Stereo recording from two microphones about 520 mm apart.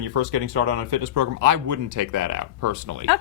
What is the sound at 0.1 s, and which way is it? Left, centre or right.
Speech, right.